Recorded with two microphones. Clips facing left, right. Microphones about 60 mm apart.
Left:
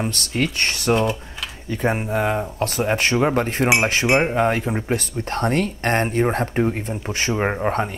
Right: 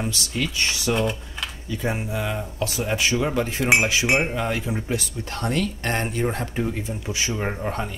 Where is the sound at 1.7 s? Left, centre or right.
Left.